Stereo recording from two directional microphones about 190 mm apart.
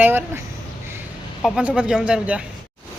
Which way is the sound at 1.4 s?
Centre (ahead or behind).